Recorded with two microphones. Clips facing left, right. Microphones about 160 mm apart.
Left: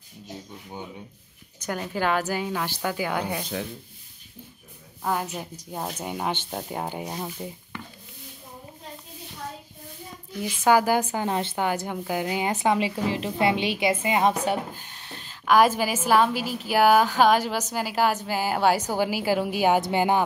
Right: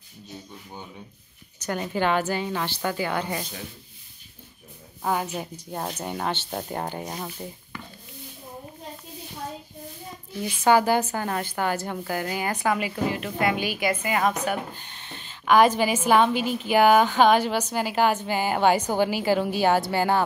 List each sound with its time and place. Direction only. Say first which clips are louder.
1.7 s a woman's voice: right 1 dB; centre (ahead or behind)
5.0 s a woman's voice: right 1 dB; centre (ahead or behind)
10.4 s a woman's voice: even; 5° left (ahead or behind); by 14.3 s 25° left (ahead or behind)
14.8 s a woman's voice: even; 5° left (ahead or behind)